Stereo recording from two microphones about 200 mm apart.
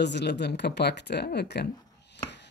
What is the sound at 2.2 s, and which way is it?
Chopping, 60° left (ahead or behind).